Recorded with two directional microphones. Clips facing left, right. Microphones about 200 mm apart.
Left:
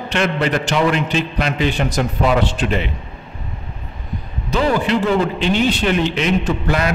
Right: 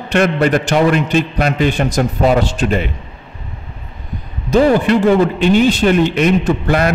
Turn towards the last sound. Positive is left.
turn(degrees=-50)  # may be behind; listen again after turning